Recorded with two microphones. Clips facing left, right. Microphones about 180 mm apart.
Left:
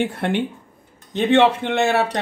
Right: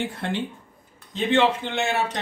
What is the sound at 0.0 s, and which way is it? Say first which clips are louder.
Speech: left 6 dB; 65° left (ahead or behind).